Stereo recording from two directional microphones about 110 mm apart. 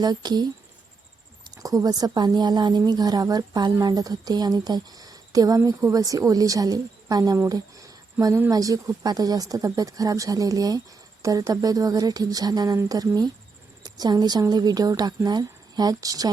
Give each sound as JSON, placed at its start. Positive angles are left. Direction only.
{"t": 0.0, "sound": "speech", "side_deg": -40}
{"t": 1.5, "sound": "speech", "side_deg": -35}
{"t": 7.4, "sound": "a sound", "side_deg": -30}
{"t": 8.4, "sound": "speech", "side_deg": -30}